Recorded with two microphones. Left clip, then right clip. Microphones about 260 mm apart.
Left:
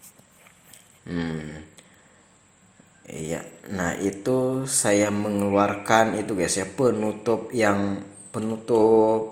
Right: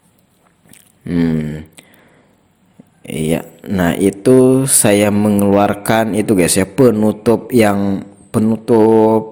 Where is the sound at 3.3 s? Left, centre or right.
Right.